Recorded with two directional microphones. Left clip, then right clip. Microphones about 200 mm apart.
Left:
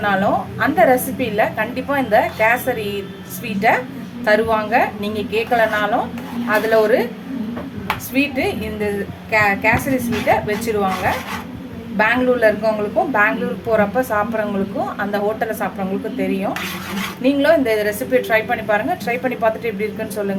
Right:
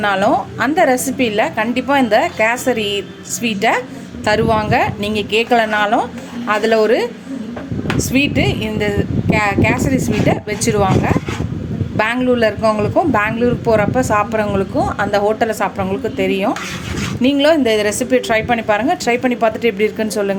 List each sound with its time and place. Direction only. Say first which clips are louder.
0.0 s a woman's voice: right 3 dB; 40° right (ahead or behind)
4.3 s a woman's voice: right 1 dB; 45° right (ahead or behind)
8.1 s a woman's voice: right 3 dB; 45° right (ahead or behind)